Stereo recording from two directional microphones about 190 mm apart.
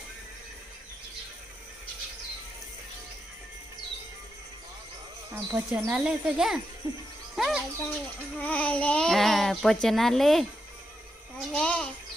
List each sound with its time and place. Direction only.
5.3 s speech: 10° right (ahead or behind)
6.8 s speech: 15° right (ahead or behind)
7.3 s a child's voice: centre (ahead or behind)